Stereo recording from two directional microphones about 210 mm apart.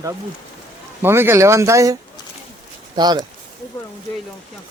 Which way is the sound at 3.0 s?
20° right (ahead or behind).